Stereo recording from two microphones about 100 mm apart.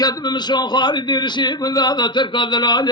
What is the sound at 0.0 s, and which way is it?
A man's voice, 45° left (ahead or behind).